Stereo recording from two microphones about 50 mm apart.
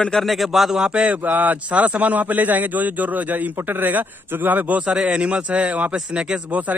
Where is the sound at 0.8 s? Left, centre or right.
Centre.